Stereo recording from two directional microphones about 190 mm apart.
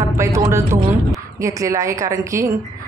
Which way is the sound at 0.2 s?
15° right (ahead or behind).